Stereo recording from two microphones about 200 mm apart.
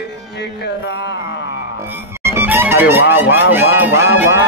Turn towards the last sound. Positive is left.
turn(degrees=-10)  # may be behind; listen again after turning